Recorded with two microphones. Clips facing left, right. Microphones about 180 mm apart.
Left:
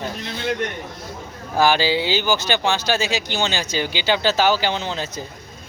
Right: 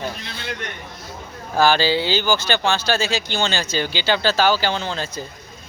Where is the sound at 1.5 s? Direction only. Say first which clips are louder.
Right 1 dB; 15° left (ahead or behind).